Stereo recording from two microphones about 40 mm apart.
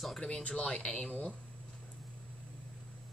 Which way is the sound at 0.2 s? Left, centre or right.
Left.